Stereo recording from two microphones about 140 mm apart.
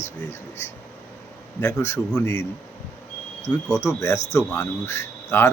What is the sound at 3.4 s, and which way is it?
Speech, 20° left (ahead or behind).